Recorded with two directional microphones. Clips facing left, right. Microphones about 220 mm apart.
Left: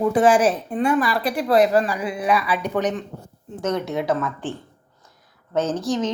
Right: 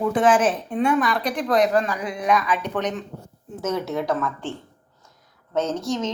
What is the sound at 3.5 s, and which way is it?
Speech, 5° right (ahead or behind).